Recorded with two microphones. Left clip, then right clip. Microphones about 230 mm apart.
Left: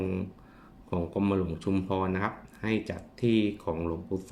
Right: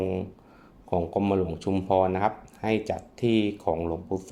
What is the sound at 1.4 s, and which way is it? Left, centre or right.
Speech, centre.